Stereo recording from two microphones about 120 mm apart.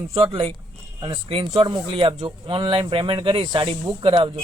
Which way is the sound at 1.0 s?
45° right (ahead or behind).